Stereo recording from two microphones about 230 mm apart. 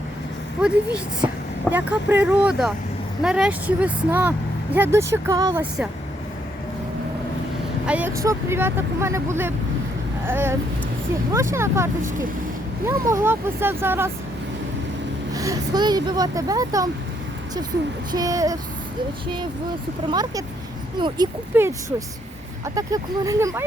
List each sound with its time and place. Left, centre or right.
0.6 s speech: centre
7.9 s speech: centre
11.5 s speech: centre
15.3 s speech: centre
18.1 s speech: centre
20.1 s speech: centre